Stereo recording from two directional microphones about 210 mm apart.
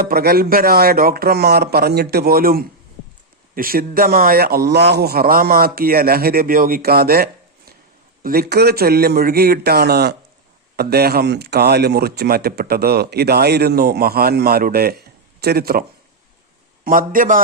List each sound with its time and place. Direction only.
0.0 s speech: 45° right (ahead or behind)
16.8 s a man's voice: 40° right (ahead or behind)